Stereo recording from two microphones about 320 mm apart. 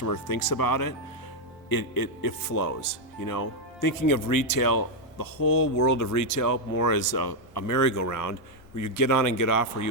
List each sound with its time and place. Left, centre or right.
0.0 s speech: left
5.6 s speech: left